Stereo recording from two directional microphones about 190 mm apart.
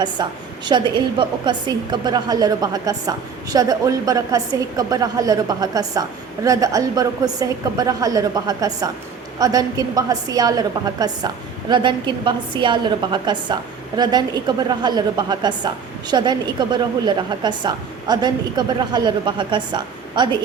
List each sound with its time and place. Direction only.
0.0 s a woman's voice: 25° right (ahead or behind)